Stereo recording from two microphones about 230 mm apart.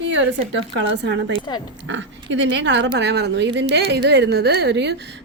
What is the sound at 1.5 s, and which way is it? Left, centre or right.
Speech, centre.